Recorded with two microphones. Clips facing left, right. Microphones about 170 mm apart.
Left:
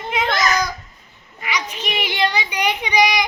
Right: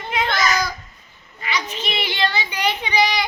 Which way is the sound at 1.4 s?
15° left (ahead or behind).